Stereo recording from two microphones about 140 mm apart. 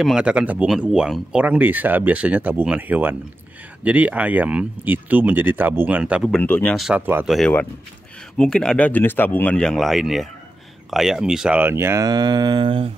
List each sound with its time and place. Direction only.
0.0 s speech: 5° right (ahead or behind)
6.2 s speech: 10° left (ahead or behind)
6.8 s speech: 5° right (ahead or behind); by 12.9 s 40° right (ahead or behind)